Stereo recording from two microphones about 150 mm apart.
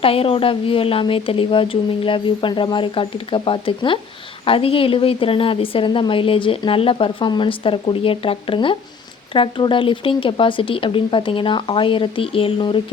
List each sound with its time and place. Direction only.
0.0 s a woman's voice: 40° left (ahead or behind)